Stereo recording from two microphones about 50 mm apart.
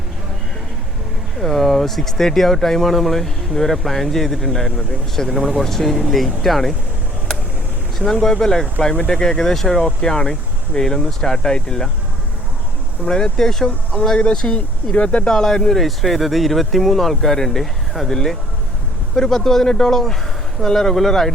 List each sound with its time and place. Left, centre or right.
1.4 s speech: centre
5.4 s speech: centre
5.6 s speech: centre
7.9 s speech: centre
13.1 s speech: centre
14.2 s speech: left
15.3 s speech: centre